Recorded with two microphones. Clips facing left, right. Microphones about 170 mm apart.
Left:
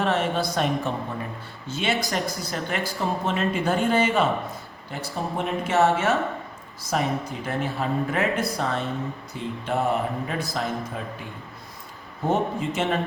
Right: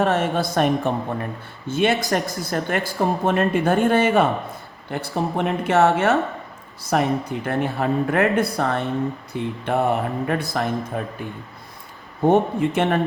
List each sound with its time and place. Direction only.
0.0 s a woman's voice: 50° right (ahead or behind)
12.3 s a woman's voice: 60° right (ahead or behind)